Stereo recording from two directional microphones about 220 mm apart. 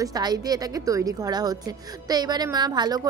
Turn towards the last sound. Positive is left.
turn(degrees=-20)  # may be behind; listen again after turning